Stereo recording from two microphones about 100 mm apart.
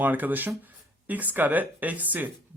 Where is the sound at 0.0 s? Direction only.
15° right (ahead or behind).